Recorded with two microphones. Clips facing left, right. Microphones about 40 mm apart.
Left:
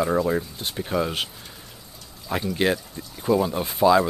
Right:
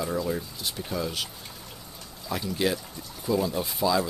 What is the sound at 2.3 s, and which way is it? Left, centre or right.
Speech, left.